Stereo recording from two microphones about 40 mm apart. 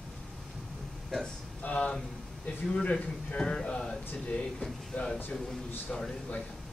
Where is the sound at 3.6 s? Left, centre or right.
Centre.